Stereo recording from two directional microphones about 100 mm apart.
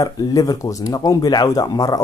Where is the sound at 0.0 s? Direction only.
35° left (ahead or behind).